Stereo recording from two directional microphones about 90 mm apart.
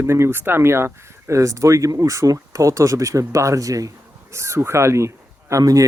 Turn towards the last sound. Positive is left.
turn(degrees=-40)  # may be behind; listen again after turning